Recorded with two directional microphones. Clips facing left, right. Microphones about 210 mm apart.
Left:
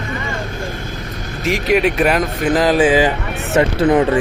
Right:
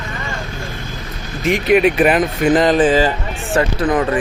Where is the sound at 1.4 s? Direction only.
Centre (ahead or behind).